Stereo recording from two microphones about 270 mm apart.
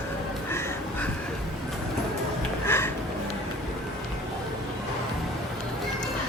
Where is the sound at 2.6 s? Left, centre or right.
Centre.